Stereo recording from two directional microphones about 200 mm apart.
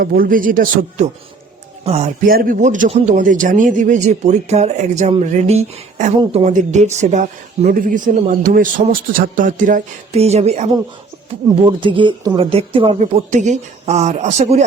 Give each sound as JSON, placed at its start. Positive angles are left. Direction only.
{"t": 0.0, "sound": "speech", "side_deg": -45}
{"t": 2.3, "sound": "speech", "side_deg": -45}